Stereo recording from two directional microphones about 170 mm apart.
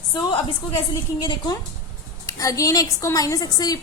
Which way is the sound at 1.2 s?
25° left (ahead or behind).